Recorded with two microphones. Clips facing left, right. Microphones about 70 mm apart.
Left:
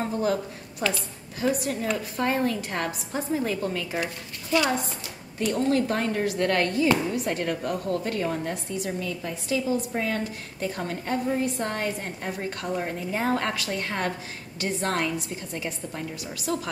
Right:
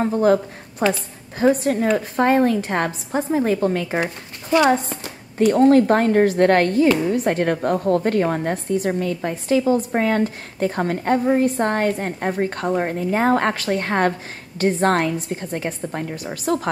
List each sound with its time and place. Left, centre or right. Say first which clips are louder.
0.0 s a woman's voice: right 9 dB; right
4.8 s a woman's voice: right 5 dB; right